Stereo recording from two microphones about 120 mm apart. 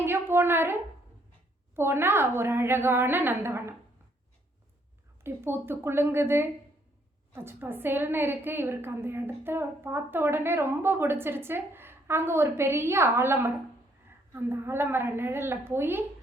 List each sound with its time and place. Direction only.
0.0 s a woman's voice: 20° right (ahead or behind)
5.2 s a woman's voice: 20° right (ahead or behind)